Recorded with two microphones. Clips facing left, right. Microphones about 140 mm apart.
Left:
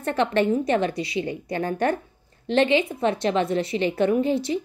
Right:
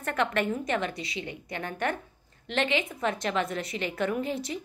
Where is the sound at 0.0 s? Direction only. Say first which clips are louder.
Left 6 dB; 30° left (ahead or behind).